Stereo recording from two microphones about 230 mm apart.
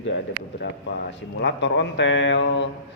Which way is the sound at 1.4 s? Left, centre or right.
Left.